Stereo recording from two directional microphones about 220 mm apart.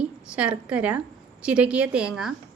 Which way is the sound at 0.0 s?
5° right (ahead or behind).